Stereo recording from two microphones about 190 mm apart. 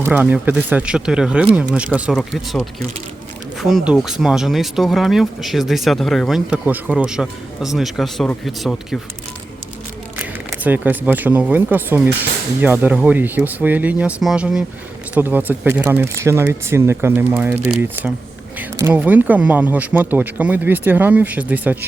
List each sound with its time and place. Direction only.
0.0 s speech: 10° right (ahead or behind)
10.2 s speech: 10° right (ahead or behind)
18.8 s speech: 10° right (ahead or behind)